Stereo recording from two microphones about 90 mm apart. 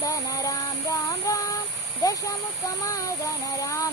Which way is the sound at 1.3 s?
40° left (ahead or behind).